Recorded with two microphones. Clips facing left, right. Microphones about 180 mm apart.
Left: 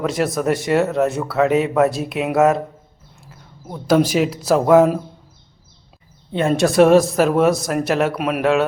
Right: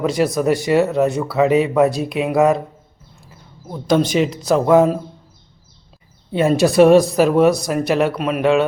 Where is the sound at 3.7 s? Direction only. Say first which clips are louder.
Left 1 dB; 5° left (ahead or behind).